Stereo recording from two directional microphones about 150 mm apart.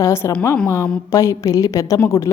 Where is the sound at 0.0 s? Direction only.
20° left (ahead or behind).